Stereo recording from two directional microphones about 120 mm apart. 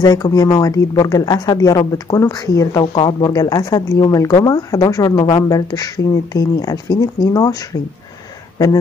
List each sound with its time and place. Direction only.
0.0 s speech: 30° left (ahead or behind)
2.9 s speech: 40° left (ahead or behind)